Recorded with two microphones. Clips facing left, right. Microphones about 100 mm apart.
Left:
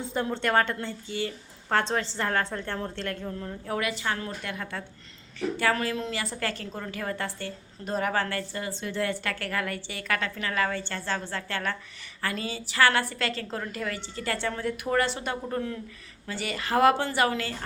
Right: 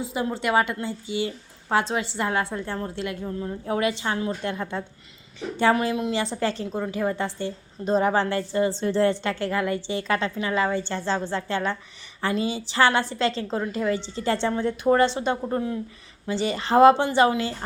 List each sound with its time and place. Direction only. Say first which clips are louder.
0.0 s a woman's voice: right 2 dB; 5° right (ahead or behind)
3.7 s a woman's voice: right 4 dB; 25° right (ahead or behind)